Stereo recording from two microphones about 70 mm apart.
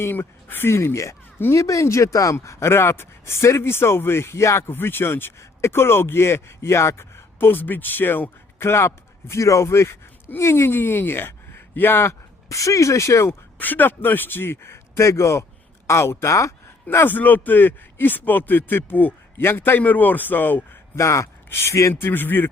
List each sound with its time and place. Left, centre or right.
0.0 s speech: left
12.5 s speech: left
13.6 s speech: left
16.9 s a man's voice: left
20.9 s speech: left
21.9 s speech: left